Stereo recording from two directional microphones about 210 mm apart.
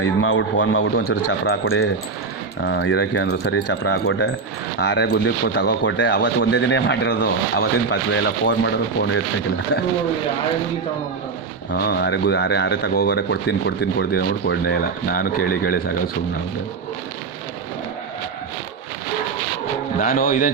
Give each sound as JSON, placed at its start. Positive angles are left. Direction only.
{"t": 0.0, "sound": "speech", "side_deg": 65}
{"t": 1.6, "sound": "speech", "side_deg": 70}
{"t": 2.6, "sound": "speech", "side_deg": 60}
{"t": 11.7, "sound": "speech", "side_deg": 50}
{"t": 20.0, "sound": "speech", "side_deg": 40}